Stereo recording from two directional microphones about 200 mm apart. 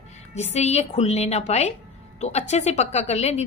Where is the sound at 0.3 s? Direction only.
35° left (ahead or behind).